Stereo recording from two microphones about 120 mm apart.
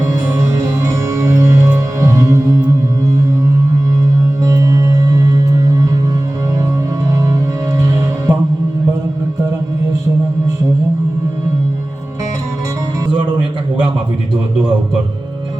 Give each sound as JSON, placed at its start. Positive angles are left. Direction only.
{"t": 0.3, "sound": "music", "side_deg": -30}
{"t": 4.4, "sound": "music", "side_deg": -30}
{"t": 7.1, "sound": "music", "side_deg": -30}